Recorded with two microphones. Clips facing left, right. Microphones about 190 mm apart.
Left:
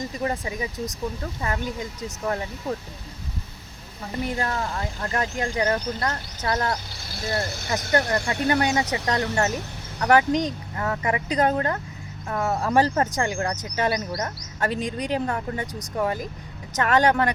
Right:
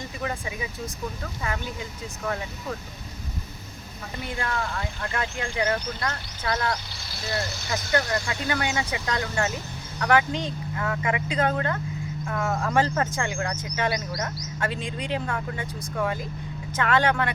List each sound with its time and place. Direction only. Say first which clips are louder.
2.0 s speech: left 2 dB; 35° left (ahead or behind)
4.2 s speech: left 3 dB; 40° left (ahead or behind); by 8.4 s 60° left (ahead or behind)
8.6 s speech: left 4 dB; 40° left (ahead or behind)